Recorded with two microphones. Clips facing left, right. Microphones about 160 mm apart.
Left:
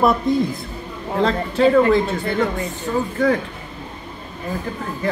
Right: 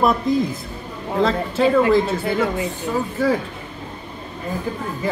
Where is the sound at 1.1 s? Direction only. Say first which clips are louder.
Even; centre (ahead or behind).